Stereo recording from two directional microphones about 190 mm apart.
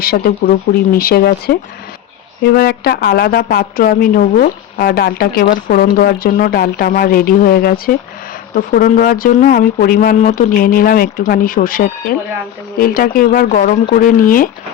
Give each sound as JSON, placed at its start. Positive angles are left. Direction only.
{"t": 0.0, "sound": "a woman's voice", "side_deg": 50}